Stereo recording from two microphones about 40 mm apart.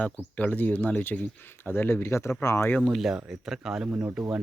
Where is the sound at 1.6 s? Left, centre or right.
Left.